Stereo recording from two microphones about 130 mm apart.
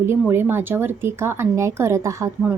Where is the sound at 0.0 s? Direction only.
15° right (ahead or behind).